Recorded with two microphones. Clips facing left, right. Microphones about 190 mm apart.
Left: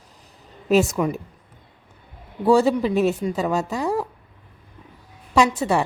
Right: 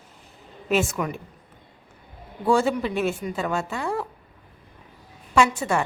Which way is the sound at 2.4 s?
35° left (ahead or behind).